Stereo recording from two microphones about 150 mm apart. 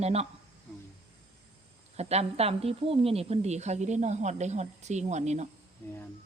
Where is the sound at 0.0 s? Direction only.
45° right (ahead or behind).